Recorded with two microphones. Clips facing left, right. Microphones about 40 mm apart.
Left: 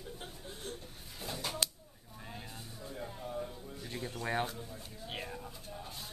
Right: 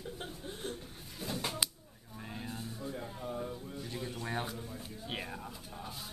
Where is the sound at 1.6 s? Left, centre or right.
Centre.